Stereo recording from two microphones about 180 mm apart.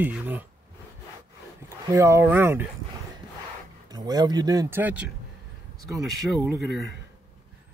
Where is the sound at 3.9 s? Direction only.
20° right (ahead or behind).